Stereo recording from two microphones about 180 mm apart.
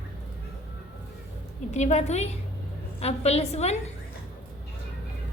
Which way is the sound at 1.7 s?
40° left (ahead or behind).